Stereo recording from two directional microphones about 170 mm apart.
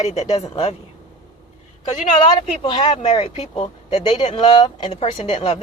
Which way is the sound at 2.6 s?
35° left (ahead or behind).